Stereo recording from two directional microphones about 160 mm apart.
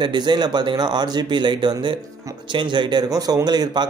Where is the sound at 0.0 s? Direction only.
30° right (ahead or behind).